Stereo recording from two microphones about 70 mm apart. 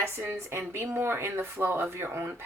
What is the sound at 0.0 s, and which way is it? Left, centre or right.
Speech, right.